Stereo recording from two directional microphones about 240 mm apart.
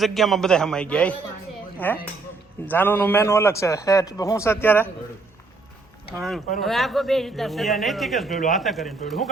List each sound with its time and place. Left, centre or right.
0.0 s a man's voice: centre
6.1 s a man's voice: centre